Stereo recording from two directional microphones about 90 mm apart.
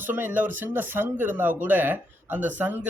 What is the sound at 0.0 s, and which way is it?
Speech, 20° right (ahead or behind).